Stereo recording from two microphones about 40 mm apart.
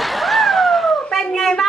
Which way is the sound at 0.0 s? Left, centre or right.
Centre.